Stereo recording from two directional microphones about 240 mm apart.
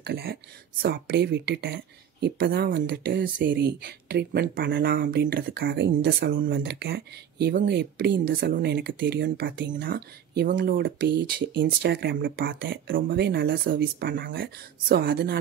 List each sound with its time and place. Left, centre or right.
0.0 s speech: right